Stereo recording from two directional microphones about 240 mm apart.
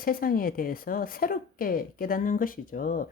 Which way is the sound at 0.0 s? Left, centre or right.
Left.